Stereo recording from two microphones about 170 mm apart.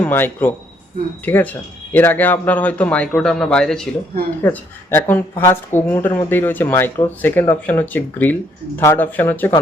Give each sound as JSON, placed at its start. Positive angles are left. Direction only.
{"t": 0.0, "sound": "speech", "side_deg": 10}
{"t": 5.3, "sound": "speech", "side_deg": 25}
{"t": 5.7, "sound": "speech", "side_deg": 15}